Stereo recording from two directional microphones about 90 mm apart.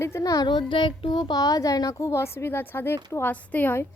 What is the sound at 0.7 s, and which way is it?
A child's voice, 70° left (ahead or behind).